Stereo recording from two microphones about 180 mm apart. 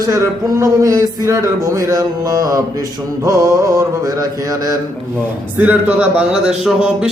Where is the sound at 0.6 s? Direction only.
20° right (ahead or behind).